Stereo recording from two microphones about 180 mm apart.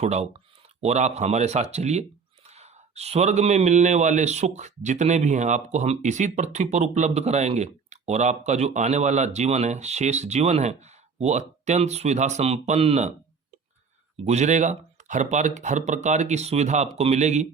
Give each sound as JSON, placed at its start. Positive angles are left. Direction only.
{"t": 0.0, "sound": "a man's voice", "side_deg": -35}
{"t": 14.3, "sound": "a man's voice", "side_deg": -40}